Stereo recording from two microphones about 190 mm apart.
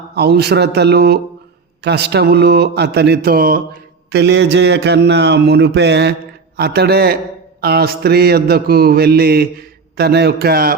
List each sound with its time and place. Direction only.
0.1 s mantra: 60° right (ahead or behind)
4.1 s mantra: 65° right (ahead or behind)